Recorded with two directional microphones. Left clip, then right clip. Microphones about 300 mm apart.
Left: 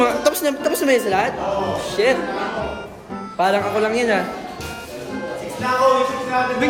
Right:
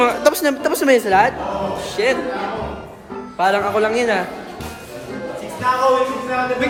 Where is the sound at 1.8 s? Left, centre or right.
Centre.